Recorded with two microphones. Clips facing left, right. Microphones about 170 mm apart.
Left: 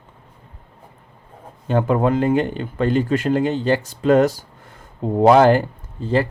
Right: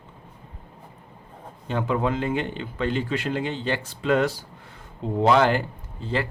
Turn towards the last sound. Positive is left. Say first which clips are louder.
# left 8 dB
turn(degrees=45)  # may be behind; listen again after turning